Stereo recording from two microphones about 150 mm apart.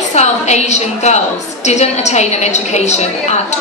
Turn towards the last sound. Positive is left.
turn(degrees=50)  # may be behind; listen again after turning